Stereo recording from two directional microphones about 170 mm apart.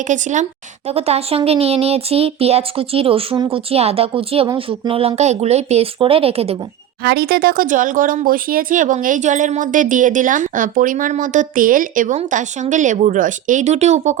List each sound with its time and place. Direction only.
0.1 s speech: 45° right (ahead or behind)
7.0 s speech: 70° right (ahead or behind); by 14.2 s 45° right (ahead or behind)